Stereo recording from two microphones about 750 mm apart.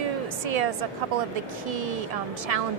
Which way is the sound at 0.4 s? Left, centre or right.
Right.